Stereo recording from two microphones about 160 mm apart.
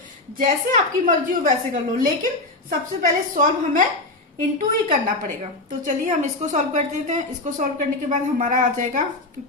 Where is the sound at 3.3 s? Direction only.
55° right (ahead or behind).